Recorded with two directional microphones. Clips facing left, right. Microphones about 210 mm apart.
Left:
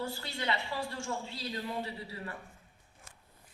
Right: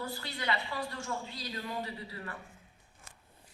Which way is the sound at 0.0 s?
25° left (ahead or behind).